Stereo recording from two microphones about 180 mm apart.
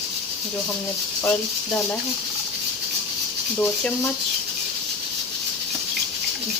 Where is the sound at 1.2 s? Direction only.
10° left (ahead or behind).